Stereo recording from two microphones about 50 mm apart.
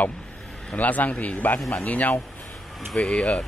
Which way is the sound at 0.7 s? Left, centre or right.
Left.